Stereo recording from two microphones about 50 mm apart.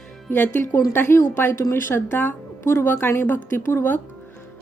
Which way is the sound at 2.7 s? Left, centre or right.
Left.